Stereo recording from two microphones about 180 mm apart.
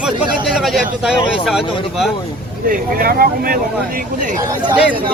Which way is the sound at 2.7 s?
55° right (ahead or behind).